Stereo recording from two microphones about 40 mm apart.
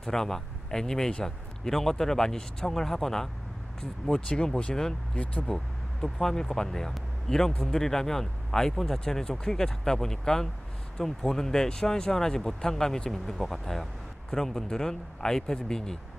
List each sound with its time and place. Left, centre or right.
0.0 s speech: centre
4.3 s speech: left
4.7 s speech: centre
5.1 s speech: left
6.0 s speech: centre